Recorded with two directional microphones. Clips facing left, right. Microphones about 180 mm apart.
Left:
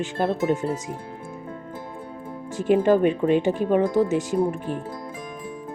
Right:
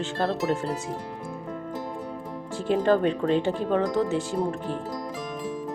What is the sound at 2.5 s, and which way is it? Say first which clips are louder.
Speech: left 4 dB; 15° left (ahead or behind).